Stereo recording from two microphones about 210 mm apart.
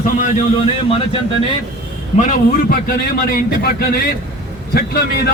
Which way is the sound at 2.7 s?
45° left (ahead or behind).